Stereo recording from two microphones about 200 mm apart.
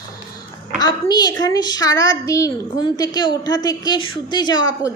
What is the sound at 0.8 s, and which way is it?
A woman's voice, 20° left (ahead or behind).